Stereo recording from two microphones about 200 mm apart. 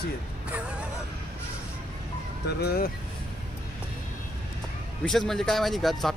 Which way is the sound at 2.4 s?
55° left (ahead or behind).